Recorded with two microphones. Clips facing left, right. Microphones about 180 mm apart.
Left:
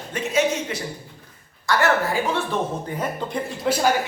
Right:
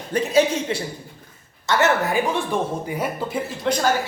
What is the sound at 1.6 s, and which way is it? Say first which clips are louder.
Speech: right 1 dB; 20° right (ahead or behind).